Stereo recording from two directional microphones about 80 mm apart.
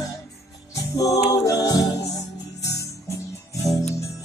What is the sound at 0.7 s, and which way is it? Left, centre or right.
Music, left.